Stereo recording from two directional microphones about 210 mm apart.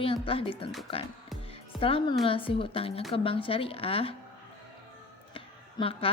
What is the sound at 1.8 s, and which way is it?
A woman's voice, 25° left (ahead or behind).